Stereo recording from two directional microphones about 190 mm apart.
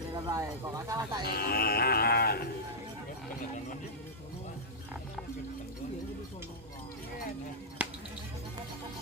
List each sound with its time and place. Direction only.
0.1 s speech: 15° right (ahead or behind)
1.2 s speech: 55° left (ahead or behind)
7.8 s music: 10° right (ahead or behind)